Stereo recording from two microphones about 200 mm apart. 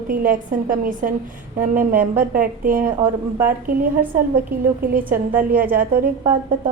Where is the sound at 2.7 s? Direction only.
10° right (ahead or behind).